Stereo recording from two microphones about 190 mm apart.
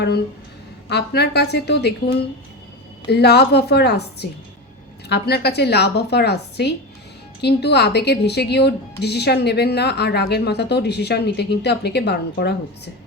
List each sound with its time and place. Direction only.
0.9 s speech: 60° left (ahead or behind)
3.1 s speech: 60° left (ahead or behind)